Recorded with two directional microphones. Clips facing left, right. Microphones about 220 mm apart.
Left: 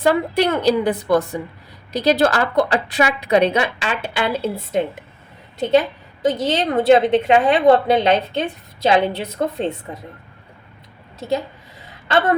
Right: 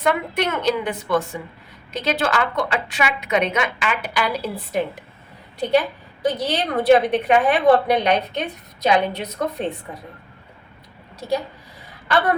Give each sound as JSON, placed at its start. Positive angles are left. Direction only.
{"t": 0.0, "sound": "a woman's voice", "side_deg": 30}
{"t": 11.2, "sound": "a woman's voice", "side_deg": 25}
{"t": 11.9, "sound": "a sound", "side_deg": 25}